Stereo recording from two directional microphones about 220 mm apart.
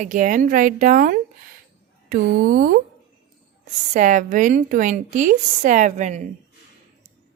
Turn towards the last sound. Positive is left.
turn(degrees=-30)  # may be behind; listen again after turning